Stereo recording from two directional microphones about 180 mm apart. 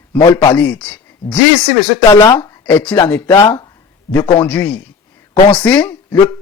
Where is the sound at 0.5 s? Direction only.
10° left (ahead or behind).